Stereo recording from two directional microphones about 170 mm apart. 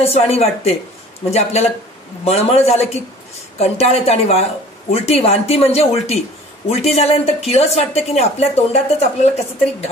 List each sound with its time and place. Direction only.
0.0 s a woman's voice: 35° left (ahead or behind)